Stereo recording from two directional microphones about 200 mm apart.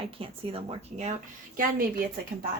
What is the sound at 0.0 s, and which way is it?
Speech, 30° right (ahead or behind).